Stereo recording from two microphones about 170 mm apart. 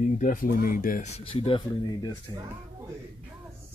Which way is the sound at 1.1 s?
35° left (ahead or behind).